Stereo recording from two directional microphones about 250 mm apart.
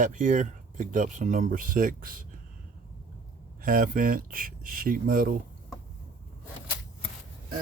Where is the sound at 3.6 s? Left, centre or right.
Right.